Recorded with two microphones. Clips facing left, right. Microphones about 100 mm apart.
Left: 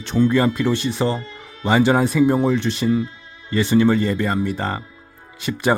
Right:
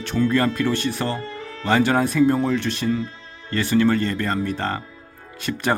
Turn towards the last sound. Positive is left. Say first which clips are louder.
# left 1 dB
turn(degrees=15)  # may be behind; listen again after turning